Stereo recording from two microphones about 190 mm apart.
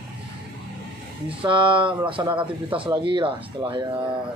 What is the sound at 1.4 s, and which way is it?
Speech, 25° right (ahead or behind).